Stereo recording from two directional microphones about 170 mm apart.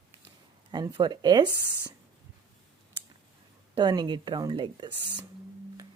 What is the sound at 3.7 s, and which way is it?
Speech, 25° right (ahead or behind).